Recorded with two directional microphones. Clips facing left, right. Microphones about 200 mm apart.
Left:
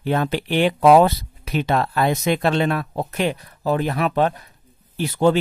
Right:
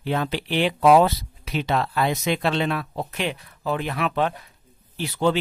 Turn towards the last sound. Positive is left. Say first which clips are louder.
# left 5 dB
turn(degrees=45)  # may be behind; listen again after turning